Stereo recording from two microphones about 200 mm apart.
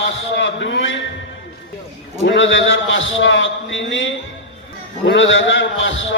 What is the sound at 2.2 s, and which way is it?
A man's voice, 70° left (ahead or behind).